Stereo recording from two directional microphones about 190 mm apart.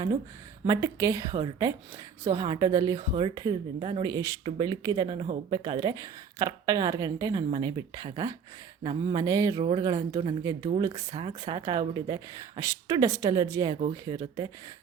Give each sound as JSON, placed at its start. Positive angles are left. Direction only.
{"t": 0.7, "sound": "a woman's voice", "side_deg": -20}
{"t": 4.0, "sound": "a woman's voice", "side_deg": -15}